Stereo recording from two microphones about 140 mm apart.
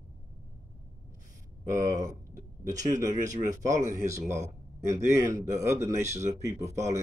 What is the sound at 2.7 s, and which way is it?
Speech, 60° right (ahead or behind).